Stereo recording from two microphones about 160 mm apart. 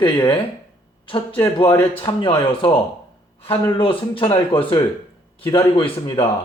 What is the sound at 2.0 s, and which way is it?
A man's voice, 30° left (ahead or behind).